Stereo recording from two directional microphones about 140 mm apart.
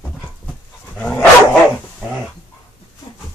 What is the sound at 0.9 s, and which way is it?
Dog, 5° left (ahead or behind).